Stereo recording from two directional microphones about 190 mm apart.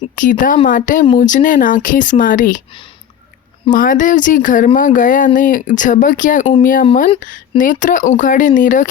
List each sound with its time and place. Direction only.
0.2 s speech: 45° left (ahead or behind)
3.7 s speech: 45° left (ahead or behind)